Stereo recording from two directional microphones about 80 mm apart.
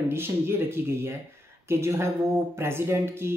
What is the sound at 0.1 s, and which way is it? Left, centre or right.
Speech, right.